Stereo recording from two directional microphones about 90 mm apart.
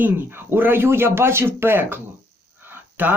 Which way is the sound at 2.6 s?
20° right (ahead or behind).